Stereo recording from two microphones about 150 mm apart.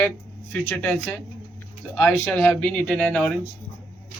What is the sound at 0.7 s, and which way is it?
Speech, 10° left (ahead or behind).